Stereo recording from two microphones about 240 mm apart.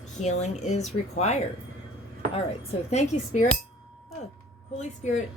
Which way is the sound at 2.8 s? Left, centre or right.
Left.